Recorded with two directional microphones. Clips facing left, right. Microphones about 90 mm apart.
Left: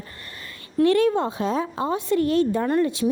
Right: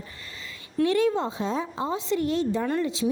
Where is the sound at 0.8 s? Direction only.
60° left (ahead or behind).